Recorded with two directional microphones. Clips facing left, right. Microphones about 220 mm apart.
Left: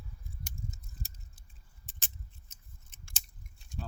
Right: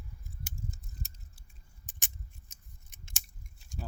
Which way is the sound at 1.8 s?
15° right (ahead or behind).